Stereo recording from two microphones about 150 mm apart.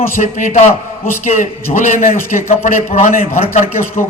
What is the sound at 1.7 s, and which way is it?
A man's voice, 55° left (ahead or behind).